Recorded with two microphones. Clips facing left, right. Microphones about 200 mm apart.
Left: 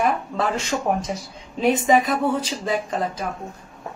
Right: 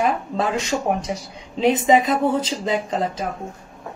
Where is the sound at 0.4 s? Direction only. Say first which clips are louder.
Right 3 dB; 15° right (ahead or behind).